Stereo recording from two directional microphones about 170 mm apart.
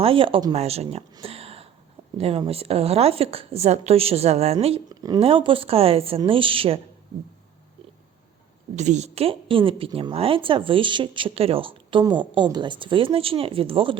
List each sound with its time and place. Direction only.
0.0 s a woman's voice: 30° right (ahead or behind)
1.2 s a sound: 35° right (ahead or behind)
2.1 s a woman's voice: 35° right (ahead or behind)
4.9 s a woman's voice: 25° right (ahead or behind)
8.7 s a woman's voice: 45° right (ahead or behind)